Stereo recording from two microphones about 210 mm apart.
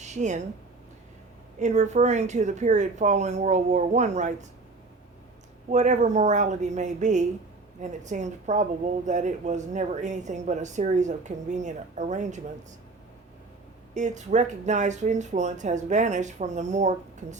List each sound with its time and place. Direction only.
0.0 s a sound: 35° right (ahead or behind)
1.5 s speech: 35° right (ahead or behind)
5.7 s speech: 35° right (ahead or behind)
13.9 s speech: 35° right (ahead or behind)